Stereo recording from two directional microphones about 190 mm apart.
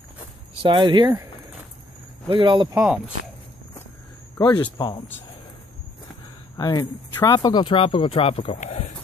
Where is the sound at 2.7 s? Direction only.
5° right (ahead or behind).